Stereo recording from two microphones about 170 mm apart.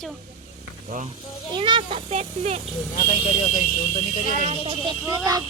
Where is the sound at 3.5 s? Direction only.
50° left (ahead or behind).